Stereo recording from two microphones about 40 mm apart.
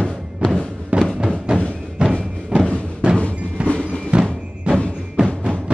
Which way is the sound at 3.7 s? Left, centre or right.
Left.